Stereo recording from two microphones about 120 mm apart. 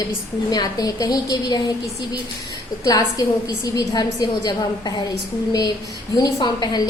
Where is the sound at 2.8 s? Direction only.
30° left (ahead or behind).